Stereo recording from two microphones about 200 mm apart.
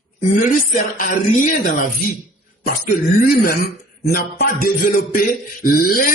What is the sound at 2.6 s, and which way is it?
Music, 45° left (ahead or behind).